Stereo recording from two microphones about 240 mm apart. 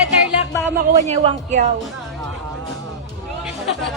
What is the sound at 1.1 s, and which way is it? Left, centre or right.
Speech, right.